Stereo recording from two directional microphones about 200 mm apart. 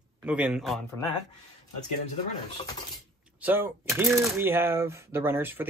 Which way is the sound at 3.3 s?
10° right (ahead or behind).